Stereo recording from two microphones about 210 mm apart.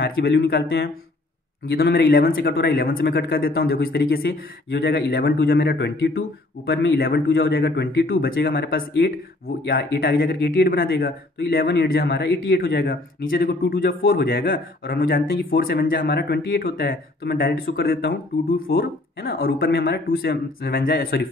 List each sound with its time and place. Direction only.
0.0 s speech: 50° left (ahead or behind)